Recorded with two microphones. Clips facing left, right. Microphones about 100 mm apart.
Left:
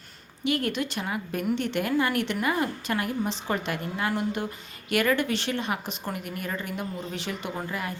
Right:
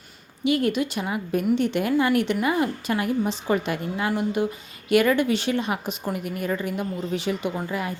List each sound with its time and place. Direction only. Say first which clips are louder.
0.4 s a woman's voice: right 5 dB; 20° right (ahead or behind)